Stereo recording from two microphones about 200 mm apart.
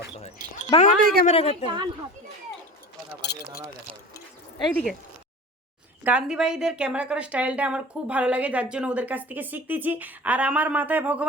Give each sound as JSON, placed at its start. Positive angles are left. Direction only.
{"t": 0.2, "sound": "a sound", "side_deg": 35}
{"t": 0.9, "sound": "speech", "side_deg": -45}
{"t": 1.2, "sound": "a woman's voice", "side_deg": 35}
{"t": 1.6, "sound": "speech", "side_deg": -25}
{"t": 3.3, "sound": "a sound", "side_deg": 55}
{"t": 4.7, "sound": "speech", "side_deg": 0}
{"t": 6.1, "sound": "a woman's voice", "side_deg": -5}